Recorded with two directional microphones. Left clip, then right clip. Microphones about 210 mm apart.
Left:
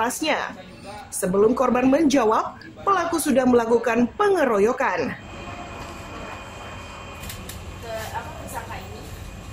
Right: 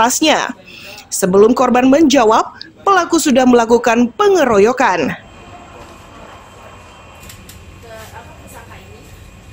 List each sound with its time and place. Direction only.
0.0 s a woman's voice: 45° right (ahead or behind)